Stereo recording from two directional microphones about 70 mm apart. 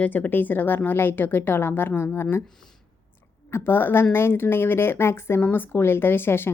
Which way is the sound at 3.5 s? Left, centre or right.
Left.